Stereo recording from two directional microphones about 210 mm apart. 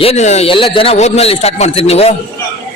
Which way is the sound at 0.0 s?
30° left (ahead or behind).